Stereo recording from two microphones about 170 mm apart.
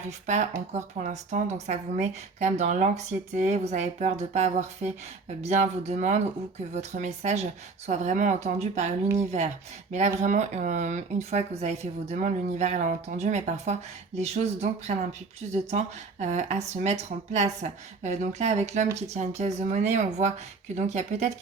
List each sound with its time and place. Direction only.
0.3 s speech: 45° right (ahead or behind)
16.2 s speech: 40° right (ahead or behind)